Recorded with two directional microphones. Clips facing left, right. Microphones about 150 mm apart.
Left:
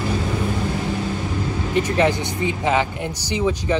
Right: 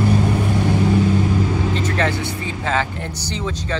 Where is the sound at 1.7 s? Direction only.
15° left (ahead or behind).